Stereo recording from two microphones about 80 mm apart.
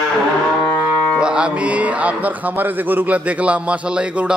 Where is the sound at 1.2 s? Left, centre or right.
Centre.